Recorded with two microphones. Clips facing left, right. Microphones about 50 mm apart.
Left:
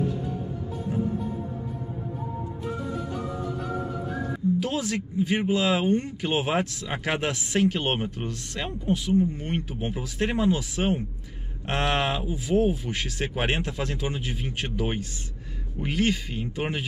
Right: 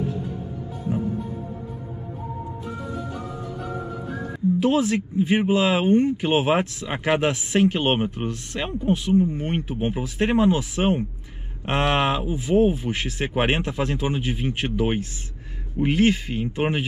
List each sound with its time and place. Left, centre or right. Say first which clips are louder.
4.6 s speech: right 7 dB; right